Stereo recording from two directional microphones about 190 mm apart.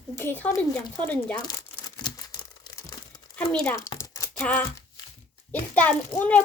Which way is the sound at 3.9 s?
20° left (ahead or behind).